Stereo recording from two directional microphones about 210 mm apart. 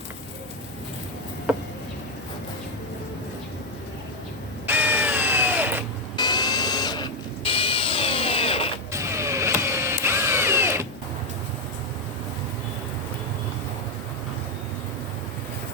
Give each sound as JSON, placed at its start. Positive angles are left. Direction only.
{"t": 4.6, "sound": "a sound", "side_deg": -10}
{"t": 6.1, "sound": "drill", "side_deg": 20}
{"t": 8.9, "sound": "vehicle", "side_deg": -15}